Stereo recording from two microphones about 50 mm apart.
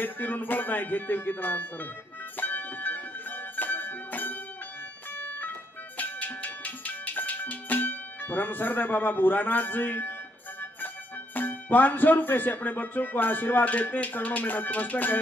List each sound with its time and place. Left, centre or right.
0.0 s speech: left
2.3 s music: left
5.9 s music: left
11.3 s speech: left